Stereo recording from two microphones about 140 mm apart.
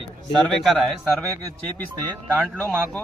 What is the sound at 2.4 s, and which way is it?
Speech, 5° left (ahead or behind).